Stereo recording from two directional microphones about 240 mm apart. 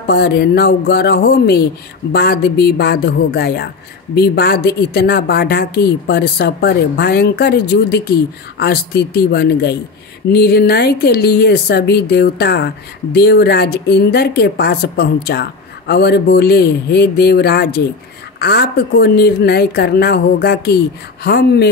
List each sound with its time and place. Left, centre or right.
0.0 s speech: left